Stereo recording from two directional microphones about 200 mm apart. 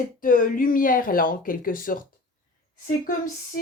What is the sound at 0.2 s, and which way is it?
Speech, 45° left (ahead or behind).